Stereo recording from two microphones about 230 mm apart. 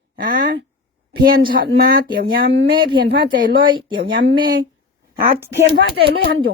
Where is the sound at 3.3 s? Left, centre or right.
Right.